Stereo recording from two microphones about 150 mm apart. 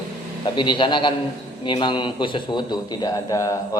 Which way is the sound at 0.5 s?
30° left (ahead or behind).